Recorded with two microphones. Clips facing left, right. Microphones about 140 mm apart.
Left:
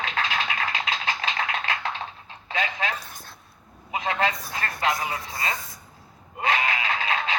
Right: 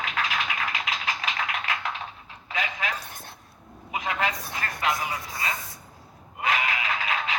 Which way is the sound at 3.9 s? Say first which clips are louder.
Left 3 dB; 30° left (ahead or behind).